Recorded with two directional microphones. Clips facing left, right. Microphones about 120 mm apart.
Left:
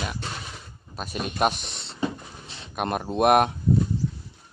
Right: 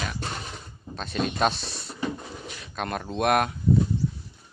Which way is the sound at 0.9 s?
10° left (ahead or behind).